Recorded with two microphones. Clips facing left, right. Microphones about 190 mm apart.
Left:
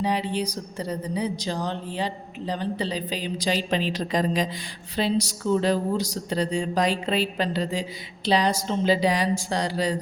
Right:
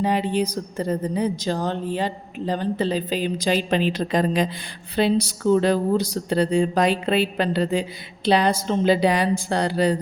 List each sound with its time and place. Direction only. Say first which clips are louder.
0.0 s a woman's voice: right 4 dB; 50° right (ahead or behind)